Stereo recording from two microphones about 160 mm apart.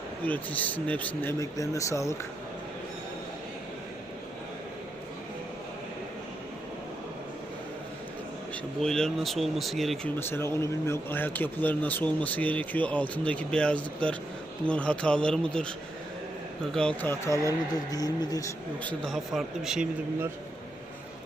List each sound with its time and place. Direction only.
0.3 s speech: 10° left (ahead or behind)
8.8 s speech: 5° left (ahead or behind)
10.2 s speech: 15° left (ahead or behind)
16.7 s speech: 5° left (ahead or behind)
18.8 s speech: 5° left (ahead or behind)